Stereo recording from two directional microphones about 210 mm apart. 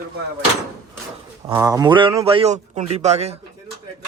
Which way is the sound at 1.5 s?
15° right (ahead or behind).